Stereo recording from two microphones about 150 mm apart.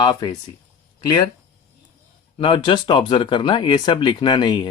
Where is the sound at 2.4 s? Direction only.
35° left (ahead or behind).